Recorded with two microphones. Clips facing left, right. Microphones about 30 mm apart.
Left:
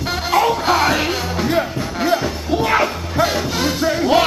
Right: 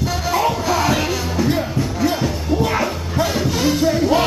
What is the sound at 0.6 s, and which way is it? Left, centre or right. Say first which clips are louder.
Music: left 2 dB; left.